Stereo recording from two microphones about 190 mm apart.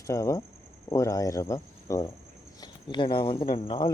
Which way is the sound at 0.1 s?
15° left (ahead or behind).